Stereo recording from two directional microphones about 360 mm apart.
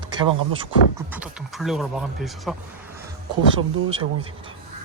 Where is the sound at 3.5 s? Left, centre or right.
Centre.